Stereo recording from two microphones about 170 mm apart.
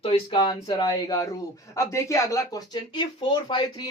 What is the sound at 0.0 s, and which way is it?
Speech, 30° left (ahead or behind).